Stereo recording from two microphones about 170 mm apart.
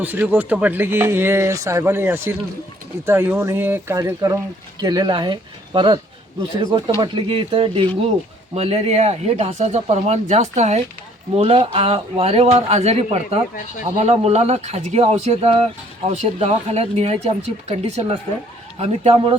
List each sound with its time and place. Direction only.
0.0 s speech: 10° right (ahead or behind); by 19.4 s 30° right (ahead or behind)